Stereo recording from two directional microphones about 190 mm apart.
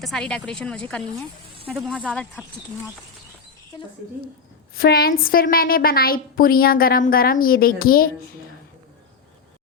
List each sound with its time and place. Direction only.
0.0 s speech: 5° left (ahead or behind)
4.7 s a woman's voice: 50° left (ahead or behind)